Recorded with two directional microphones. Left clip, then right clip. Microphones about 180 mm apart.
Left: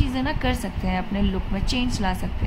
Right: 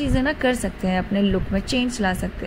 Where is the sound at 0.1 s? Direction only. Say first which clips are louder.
Right 6 dB; 20° right (ahead or behind).